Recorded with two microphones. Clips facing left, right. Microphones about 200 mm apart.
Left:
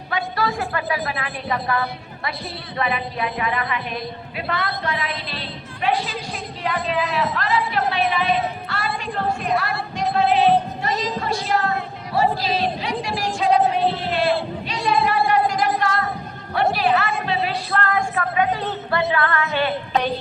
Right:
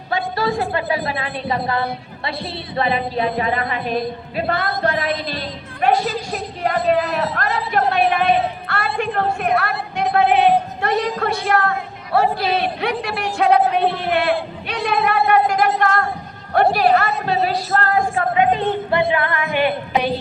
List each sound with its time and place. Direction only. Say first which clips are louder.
0.1 s a sound: right 3 dB; 30° right (ahead or behind)
2.7 s a woman's voice: right 5 dB; 30° right (ahead or behind); by 7.2 s 60° right (ahead or behind)
7.2 s a woman's voice: even; 40° right (ahead or behind); by 8.4 s 55° right (ahead or behind)
8.6 s music: right 5 dB; 55° right (ahead or behind)
10.8 s a man's voice: right 4 dB; 60° right (ahead or behind); by 18.4 s 30° right (ahead or behind)
19.1 s music: right 2 dB; 15° right (ahead or behind)